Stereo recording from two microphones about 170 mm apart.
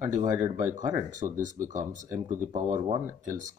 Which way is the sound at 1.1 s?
50° right (ahead or behind).